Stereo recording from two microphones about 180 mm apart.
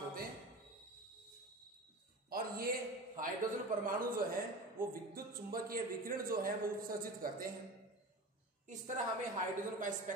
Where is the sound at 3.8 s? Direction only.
50° right (ahead or behind).